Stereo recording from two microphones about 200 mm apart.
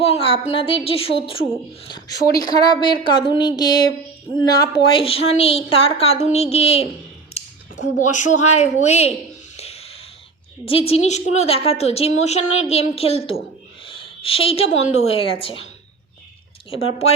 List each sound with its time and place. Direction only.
0.0 s a woman's voice: 30° left (ahead or behind)
7.4 s a sound: 30° left (ahead or behind)
7.9 s a woman's voice: 40° left (ahead or behind)
9.6 s a sound: 30° left (ahead or behind)
10.7 s a woman's voice: 30° left (ahead or behind)
16.6 s a woman's voice: 30° left (ahead or behind)